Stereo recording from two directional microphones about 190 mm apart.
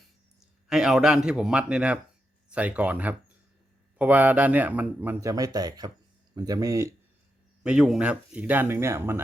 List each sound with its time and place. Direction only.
0.7 s a man's voice: centre (ahead or behind)
7.6 s a man's voice: 5° right (ahead or behind)